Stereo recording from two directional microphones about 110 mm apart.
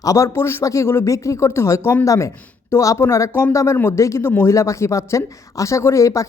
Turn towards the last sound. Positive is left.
turn(degrees=30)  # may be behind; listen again after turning